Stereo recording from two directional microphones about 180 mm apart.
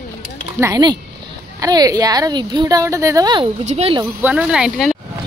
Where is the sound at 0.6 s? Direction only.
20° right (ahead or behind).